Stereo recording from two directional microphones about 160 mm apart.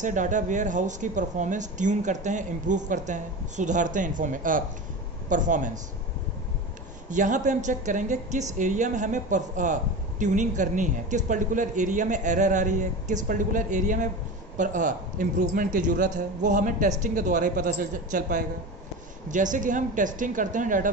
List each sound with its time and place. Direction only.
0.0 s a woman's voice: 50° right (ahead or behind)
7.1 s a woman's voice: 50° right (ahead or behind)